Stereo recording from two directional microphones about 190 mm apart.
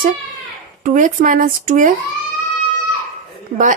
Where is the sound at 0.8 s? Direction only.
40° right (ahead or behind).